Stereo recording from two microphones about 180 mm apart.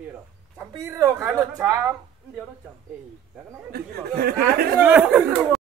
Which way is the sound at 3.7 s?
55° right (ahead or behind).